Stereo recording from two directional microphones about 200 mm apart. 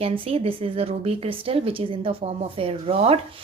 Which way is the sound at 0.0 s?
30° right (ahead or behind).